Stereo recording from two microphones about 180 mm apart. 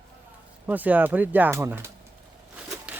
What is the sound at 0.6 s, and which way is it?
Speech, 10° right (ahead or behind).